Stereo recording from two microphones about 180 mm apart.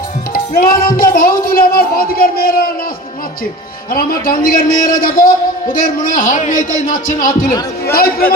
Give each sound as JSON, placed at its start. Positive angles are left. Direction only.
{"t": 0.3, "sound": "a man's voice", "side_deg": 50}
{"t": 3.9, "sound": "a man's voice", "side_deg": 55}